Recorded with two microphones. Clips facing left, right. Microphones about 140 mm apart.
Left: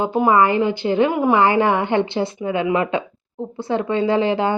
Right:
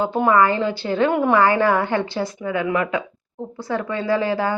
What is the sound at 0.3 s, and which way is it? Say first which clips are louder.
A woman's voice: left 1 dB; 20° left (ahead or behind).